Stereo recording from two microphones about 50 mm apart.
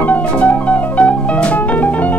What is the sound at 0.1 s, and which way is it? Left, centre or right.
Music, left.